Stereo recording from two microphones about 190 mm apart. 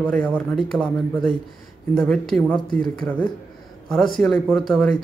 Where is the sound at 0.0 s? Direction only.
5° left (ahead or behind).